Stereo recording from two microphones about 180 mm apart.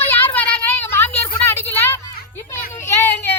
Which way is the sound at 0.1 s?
10° left (ahead or behind).